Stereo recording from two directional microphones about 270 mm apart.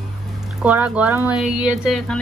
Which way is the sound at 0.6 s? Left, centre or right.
Centre.